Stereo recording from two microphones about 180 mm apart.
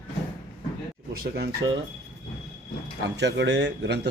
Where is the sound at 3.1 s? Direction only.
75° right (ahead or behind).